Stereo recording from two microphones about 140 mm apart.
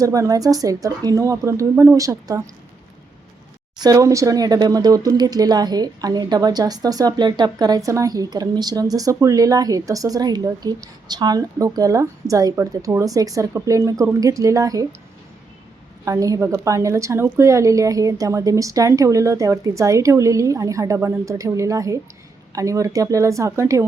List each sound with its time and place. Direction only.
0.0 s speech: 25° right (ahead or behind)
3.8 s speech: 25° right (ahead or behind)
16.0 s speech: 25° right (ahead or behind)